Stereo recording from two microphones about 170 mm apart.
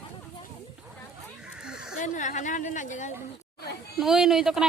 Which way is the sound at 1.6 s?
5° right (ahead or behind).